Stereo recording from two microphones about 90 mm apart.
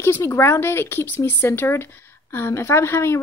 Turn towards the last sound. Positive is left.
turn(degrees=30)  # may be behind; listen again after turning